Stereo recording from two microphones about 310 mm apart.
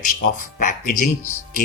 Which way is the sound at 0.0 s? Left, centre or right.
Left.